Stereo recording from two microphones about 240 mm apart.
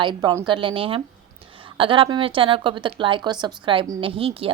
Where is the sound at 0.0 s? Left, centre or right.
Centre.